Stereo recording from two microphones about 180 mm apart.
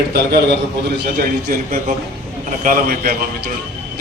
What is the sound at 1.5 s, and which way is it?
A man's voice, 50° right (ahead or behind).